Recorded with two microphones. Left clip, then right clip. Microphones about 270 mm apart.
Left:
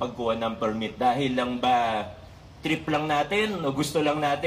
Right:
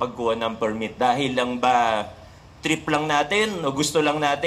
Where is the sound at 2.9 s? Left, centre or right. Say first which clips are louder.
Right 4 dB; right.